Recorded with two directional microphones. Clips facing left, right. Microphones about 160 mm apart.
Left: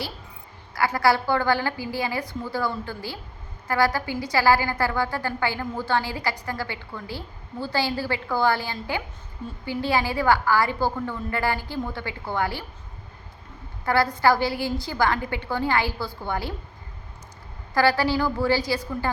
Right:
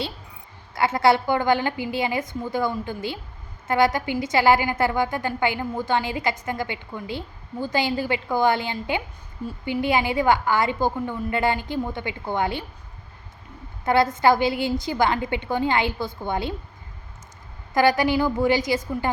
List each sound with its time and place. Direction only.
0.7 s a woman's voice: 25° right (ahead or behind)
13.8 s a woman's voice: 20° right (ahead or behind)
17.7 s a woman's voice: 20° right (ahead or behind)